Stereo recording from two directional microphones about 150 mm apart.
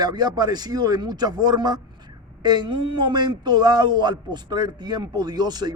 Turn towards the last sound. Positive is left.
turn(degrees=-30)  # may be behind; listen again after turning